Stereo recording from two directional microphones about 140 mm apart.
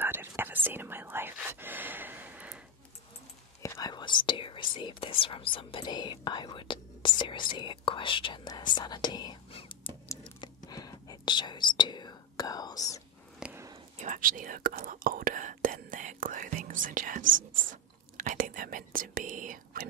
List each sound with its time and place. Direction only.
0.0 s whispering: 15° right (ahead or behind)
3.6 s speech: 25° left (ahead or behind); by 9.9 s 40° left (ahead or behind)
10.2 s whispering: 30° left (ahead or behind)
13.4 s a sound: 15° right (ahead or behind)
13.9 s whispering: 60° right (ahead or behind)